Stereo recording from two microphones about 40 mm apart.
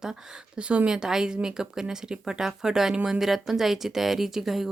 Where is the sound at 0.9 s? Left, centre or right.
Centre.